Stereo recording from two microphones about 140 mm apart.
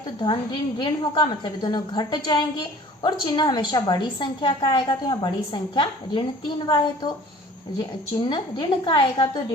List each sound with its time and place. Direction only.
0.2 s a woman's voice: 35° left (ahead or behind)
8.3 s a woman's voice: 30° left (ahead or behind)